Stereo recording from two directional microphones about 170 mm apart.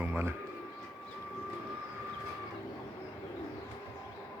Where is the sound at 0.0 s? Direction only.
10° right (ahead or behind).